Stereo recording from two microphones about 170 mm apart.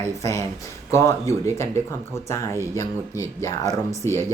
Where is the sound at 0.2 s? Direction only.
15° left (ahead or behind).